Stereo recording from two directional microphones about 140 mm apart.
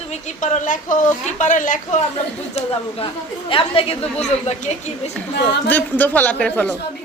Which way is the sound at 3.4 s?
40° left (ahead or behind).